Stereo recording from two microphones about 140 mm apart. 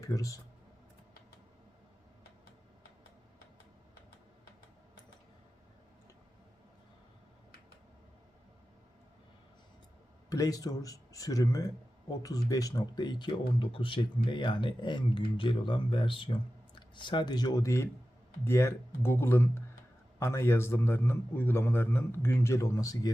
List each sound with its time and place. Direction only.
0.0 s speech: 25° left (ahead or behind)
10.2 s a man's voice: 25° left (ahead or behind)